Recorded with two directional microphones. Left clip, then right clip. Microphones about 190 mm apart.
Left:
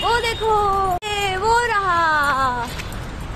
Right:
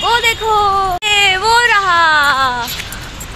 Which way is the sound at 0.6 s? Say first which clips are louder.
Right 6 dB; 10° right (ahead or behind).